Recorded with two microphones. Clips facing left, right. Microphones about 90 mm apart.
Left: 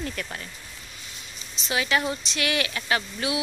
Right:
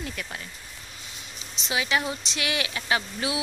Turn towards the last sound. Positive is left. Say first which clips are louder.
# left 1 dB
turn(degrees=-25)  # may be behind; listen again after turning